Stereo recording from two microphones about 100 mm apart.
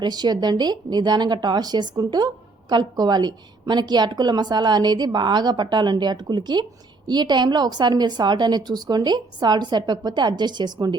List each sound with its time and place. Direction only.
0.0 s speech: 45° right (ahead or behind)